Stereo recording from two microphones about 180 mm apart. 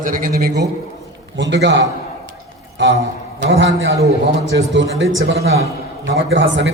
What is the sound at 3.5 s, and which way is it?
A man's voice, 90° right.